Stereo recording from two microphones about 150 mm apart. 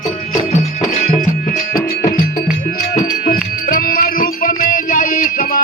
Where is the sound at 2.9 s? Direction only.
60° left (ahead or behind).